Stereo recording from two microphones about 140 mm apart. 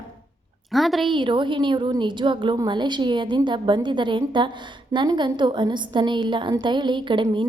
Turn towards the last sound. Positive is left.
turn(degrees=-35)  # may be behind; listen again after turning